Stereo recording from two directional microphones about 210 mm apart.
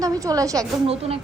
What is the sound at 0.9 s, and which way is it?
Speech, 30° right (ahead or behind).